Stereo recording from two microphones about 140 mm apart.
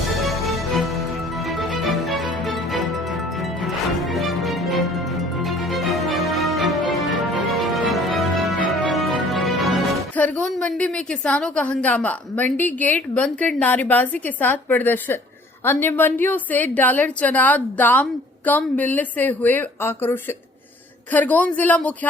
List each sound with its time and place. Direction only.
0.1 s music: centre (ahead or behind)
4.0 s music: centre (ahead or behind)
10.2 s a woman's voice: 10° left (ahead or behind)